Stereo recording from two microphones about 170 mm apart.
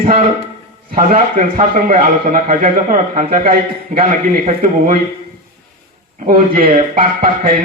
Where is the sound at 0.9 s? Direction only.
50° right (ahead or behind).